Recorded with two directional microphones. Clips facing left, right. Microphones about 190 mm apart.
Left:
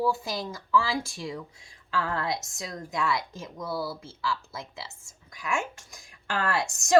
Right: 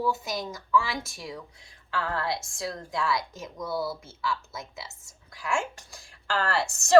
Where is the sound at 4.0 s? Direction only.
30° left (ahead or behind).